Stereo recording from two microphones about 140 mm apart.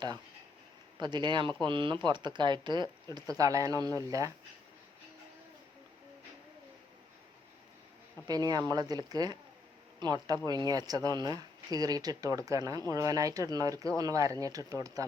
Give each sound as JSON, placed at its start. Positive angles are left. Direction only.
{"t": 0.9, "sound": "speech", "side_deg": -30}
{"t": 8.3, "sound": "speech", "side_deg": -25}